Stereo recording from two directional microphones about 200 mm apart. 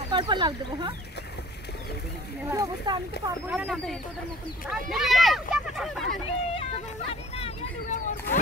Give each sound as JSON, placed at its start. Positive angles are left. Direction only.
{"t": 0.1, "sound": "speech", "side_deg": -25}
{"t": 2.5, "sound": "speech", "side_deg": -15}
{"t": 3.4, "sound": "speech", "side_deg": -5}
{"t": 6.2, "sound": "speech", "side_deg": 30}